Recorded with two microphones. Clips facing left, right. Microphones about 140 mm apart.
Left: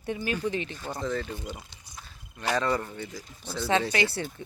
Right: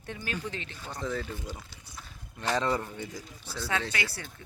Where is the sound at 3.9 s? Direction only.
25° left (ahead or behind).